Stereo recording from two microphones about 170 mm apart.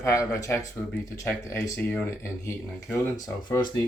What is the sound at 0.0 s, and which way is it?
Speech, 15° left (ahead or behind).